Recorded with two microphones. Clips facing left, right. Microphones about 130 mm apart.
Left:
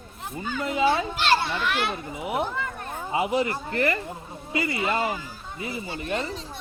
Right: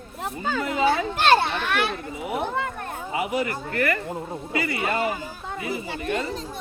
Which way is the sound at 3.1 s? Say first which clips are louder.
Left 2 dB; 25° left (ahead or behind).